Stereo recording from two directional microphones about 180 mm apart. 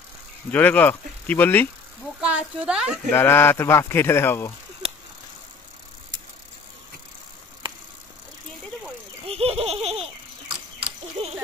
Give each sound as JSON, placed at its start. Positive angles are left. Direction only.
{"t": 0.5, "sound": "speech", "side_deg": 10}
{"t": 2.1, "sound": "a woman's voice", "side_deg": -5}
{"t": 3.1, "sound": "speech", "side_deg": 15}
{"t": 4.8, "sound": "a sound", "side_deg": -30}
{"t": 9.3, "sound": "laughter", "side_deg": -35}